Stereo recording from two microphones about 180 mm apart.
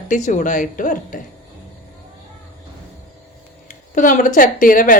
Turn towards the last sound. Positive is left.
turn(degrees=50)  # may be behind; listen again after turning